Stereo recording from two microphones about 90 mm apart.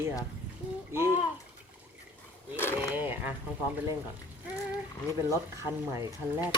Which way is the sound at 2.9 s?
20° right (ahead or behind).